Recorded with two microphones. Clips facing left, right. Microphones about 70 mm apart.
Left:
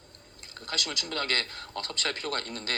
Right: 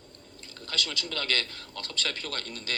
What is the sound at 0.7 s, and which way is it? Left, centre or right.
A man's voice, left.